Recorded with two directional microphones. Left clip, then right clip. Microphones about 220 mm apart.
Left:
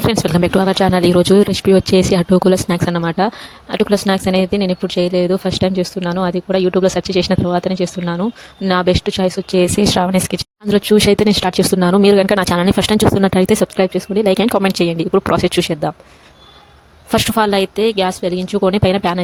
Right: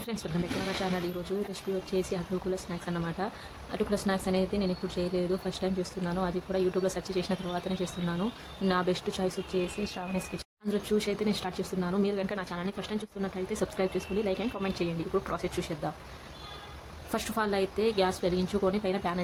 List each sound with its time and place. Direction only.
0.2 s speech: 45° left (ahead or behind)
17.1 s speech: 40° left (ahead or behind)